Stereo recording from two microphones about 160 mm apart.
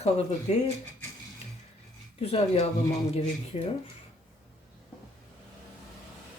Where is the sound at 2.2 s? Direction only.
40° left (ahead or behind).